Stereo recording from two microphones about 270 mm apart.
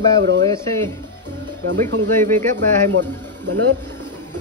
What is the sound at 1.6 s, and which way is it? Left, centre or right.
Speech, right.